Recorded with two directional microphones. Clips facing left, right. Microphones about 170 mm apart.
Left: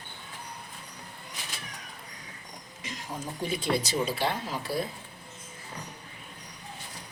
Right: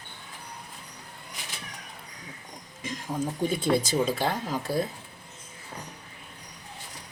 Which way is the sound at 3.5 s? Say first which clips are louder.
Right 2 dB; 50° right (ahead or behind).